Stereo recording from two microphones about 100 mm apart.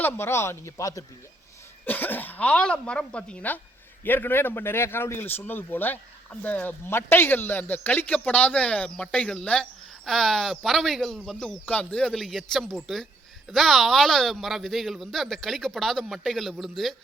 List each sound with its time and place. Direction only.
0.0 s a man's voice: 25° left (ahead or behind)
1.8 s a man's voice: 20° left (ahead or behind); by 16.9 s centre (ahead or behind)